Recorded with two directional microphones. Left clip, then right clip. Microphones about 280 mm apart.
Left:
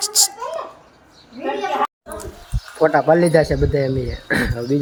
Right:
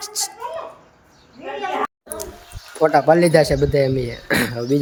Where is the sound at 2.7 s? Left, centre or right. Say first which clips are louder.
Even; centre.